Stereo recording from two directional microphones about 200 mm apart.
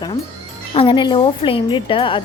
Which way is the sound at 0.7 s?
25° left (ahead or behind).